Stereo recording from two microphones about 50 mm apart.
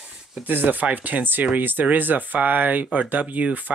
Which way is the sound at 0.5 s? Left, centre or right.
Right.